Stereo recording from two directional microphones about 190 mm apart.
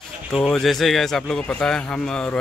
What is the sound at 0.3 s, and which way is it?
Speech, centre (ahead or behind).